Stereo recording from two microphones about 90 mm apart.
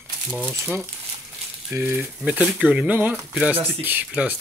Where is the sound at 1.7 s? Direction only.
25° right (ahead or behind).